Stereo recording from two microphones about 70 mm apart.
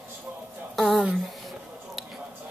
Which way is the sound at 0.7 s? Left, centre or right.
Centre.